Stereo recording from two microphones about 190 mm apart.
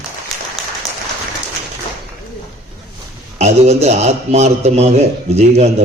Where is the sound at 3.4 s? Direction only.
35° right (ahead or behind).